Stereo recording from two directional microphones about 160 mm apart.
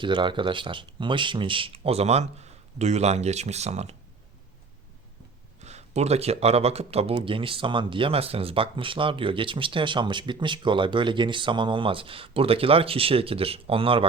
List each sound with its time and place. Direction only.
0.0 s speech: 30° right (ahead or behind)
5.6 s speech: 45° right (ahead or behind)